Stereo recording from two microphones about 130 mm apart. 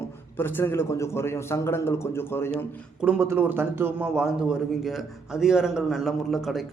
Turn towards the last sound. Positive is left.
turn(degrees=0)  # may be behind; listen again after turning